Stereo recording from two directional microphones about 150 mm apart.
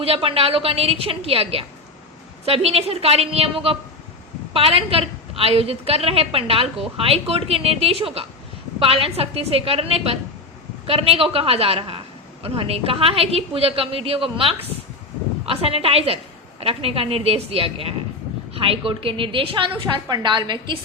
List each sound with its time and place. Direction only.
0.0 s a woman's voice: 40° right (ahead or behind)